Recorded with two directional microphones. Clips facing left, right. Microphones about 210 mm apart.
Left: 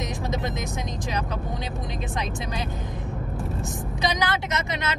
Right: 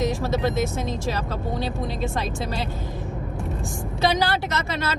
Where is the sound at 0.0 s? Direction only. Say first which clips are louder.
Right 6 dB; 15° left (ahead or behind).